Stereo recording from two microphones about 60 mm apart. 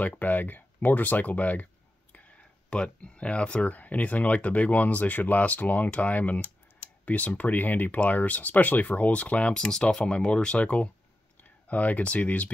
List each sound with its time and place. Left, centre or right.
0.0 s speech: left